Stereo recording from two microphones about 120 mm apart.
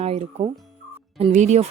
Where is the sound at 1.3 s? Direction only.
80° right.